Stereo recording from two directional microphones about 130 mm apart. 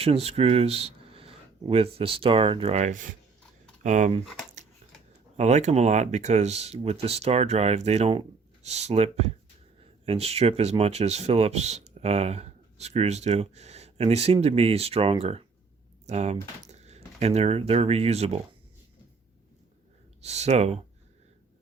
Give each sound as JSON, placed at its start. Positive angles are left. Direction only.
{"t": 0.0, "sound": "speech", "side_deg": -50}
{"t": 3.8, "sound": "speech", "side_deg": -65}
{"t": 5.4, "sound": "speech", "side_deg": -60}
{"t": 20.2, "sound": "speech", "side_deg": -55}